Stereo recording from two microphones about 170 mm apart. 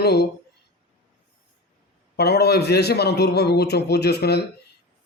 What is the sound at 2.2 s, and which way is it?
Speech, 70° left (ahead or behind).